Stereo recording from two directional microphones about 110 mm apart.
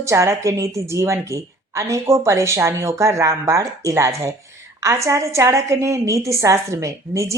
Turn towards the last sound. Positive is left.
turn(degrees=-25)  # may be behind; listen again after turning